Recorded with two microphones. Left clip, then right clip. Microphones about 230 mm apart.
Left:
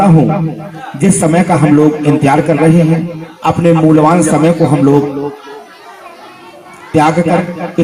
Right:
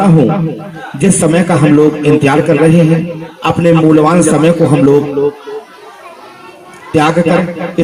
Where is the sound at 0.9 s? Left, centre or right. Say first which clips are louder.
Right 1 dB; right.